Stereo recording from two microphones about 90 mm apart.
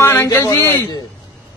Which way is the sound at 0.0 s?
30° left (ahead or behind).